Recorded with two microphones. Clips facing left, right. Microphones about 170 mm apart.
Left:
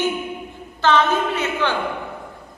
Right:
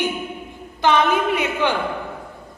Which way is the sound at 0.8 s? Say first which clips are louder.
Even; 15° right (ahead or behind).